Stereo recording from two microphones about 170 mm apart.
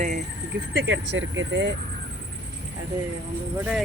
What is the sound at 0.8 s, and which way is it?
Speech, 90° right.